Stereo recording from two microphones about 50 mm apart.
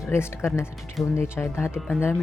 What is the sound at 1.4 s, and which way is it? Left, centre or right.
Speech, left.